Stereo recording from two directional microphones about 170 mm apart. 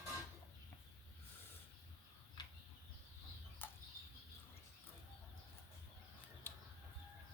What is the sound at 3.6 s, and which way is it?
Bird flight, 10° left (ahead or behind).